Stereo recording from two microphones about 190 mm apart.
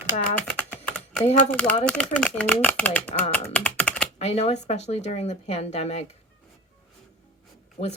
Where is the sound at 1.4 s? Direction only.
5° left (ahead or behind).